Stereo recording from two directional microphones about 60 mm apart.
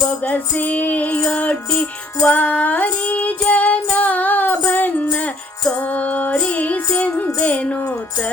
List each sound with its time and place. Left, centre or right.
0.3 s music: left